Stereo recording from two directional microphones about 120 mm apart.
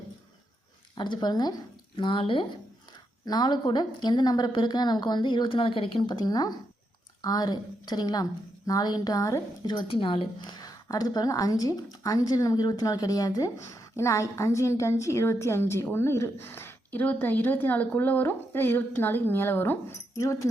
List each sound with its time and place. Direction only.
0.9 s a woman's voice: 40° left (ahead or behind)
2.0 s a woman's voice: 45° left (ahead or behind)
10.6 s a woman's voice: 30° left (ahead or behind)